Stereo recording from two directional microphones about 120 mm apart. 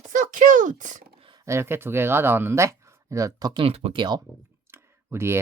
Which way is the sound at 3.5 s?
50° right (ahead or behind).